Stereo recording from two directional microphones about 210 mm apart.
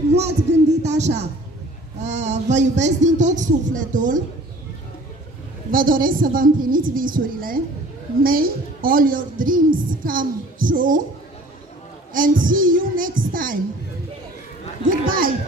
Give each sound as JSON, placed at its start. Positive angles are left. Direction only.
{"t": 0.1, "sound": "a sound", "side_deg": -30}
{"t": 2.0, "sound": "a woman's voice", "side_deg": -35}
{"t": 5.7, "sound": "a woman's voice", "side_deg": -40}
{"t": 12.1, "sound": "a woman's voice", "side_deg": -40}
{"t": 14.9, "sound": "a woman's voice", "side_deg": -40}